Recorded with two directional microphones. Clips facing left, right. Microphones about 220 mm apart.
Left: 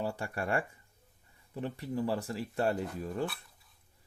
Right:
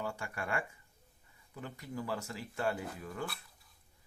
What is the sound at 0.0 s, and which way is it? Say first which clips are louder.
Speech: left 5 dB; 35° left (ahead or behind).